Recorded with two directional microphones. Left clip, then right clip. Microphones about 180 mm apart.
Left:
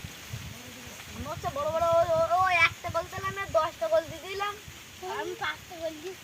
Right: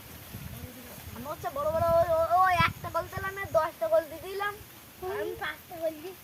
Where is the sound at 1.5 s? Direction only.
5° left (ahead or behind).